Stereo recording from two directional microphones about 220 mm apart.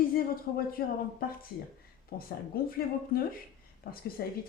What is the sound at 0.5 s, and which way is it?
Speech, 45° left (ahead or behind).